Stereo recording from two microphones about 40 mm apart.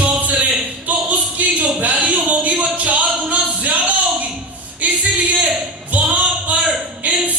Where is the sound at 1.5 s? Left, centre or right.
Right.